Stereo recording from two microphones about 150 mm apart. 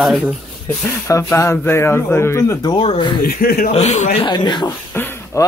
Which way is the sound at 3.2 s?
80° left.